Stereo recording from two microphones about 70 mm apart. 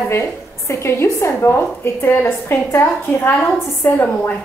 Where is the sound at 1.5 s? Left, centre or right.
Left.